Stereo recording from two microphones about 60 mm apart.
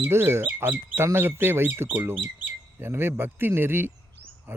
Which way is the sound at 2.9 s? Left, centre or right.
Right.